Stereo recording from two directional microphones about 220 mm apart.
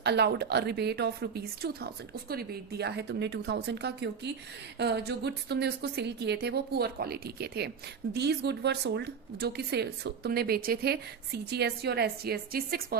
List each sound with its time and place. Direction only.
0.0 s speech: 50° right (ahead or behind)